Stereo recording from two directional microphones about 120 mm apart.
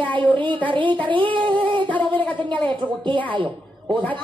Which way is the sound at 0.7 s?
45° right (ahead or behind).